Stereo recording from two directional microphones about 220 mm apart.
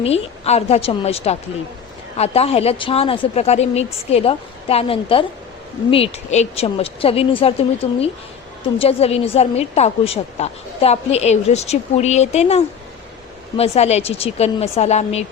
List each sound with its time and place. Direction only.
0.0 s a woman's voice: 30° left (ahead or behind)